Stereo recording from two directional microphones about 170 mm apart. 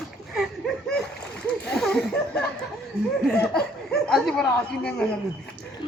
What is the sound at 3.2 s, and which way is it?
Speech, 5° left (ahead or behind).